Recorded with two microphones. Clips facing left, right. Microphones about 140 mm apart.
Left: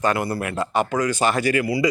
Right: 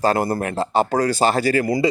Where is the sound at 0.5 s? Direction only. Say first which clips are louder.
Right 2 dB; 30° right (ahead or behind).